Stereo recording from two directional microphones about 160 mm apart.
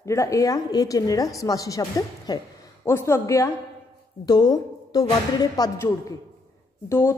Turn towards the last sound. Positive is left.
turn(degrees=15)  # may be behind; listen again after turning